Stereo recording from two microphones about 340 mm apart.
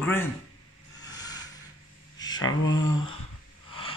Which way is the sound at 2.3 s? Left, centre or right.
Left.